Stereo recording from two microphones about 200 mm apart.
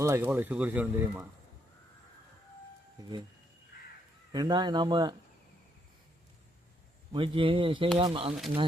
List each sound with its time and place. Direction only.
0.0 s speech: 10° right (ahead or behind)
4.3 s speech: 20° right (ahead or behind)
7.1 s speech: 25° right (ahead or behind)